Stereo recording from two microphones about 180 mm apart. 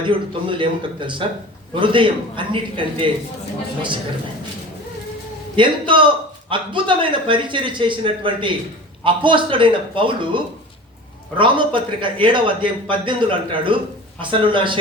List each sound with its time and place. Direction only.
0.0 s a man's voice: 25° right (ahead or behind)
5.5 s a man's voice: 25° right (ahead or behind)